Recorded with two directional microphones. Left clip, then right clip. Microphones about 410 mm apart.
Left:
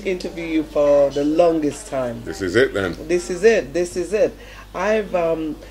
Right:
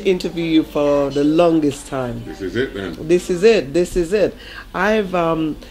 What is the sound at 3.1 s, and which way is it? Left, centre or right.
Speech, right.